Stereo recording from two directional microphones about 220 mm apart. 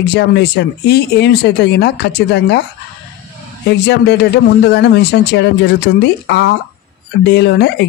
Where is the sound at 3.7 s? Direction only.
50° left (ahead or behind).